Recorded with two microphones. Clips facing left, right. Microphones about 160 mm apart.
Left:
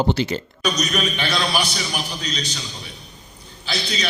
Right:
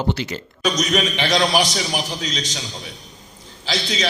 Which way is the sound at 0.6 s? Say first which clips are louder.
Right 4 dB; 90° right.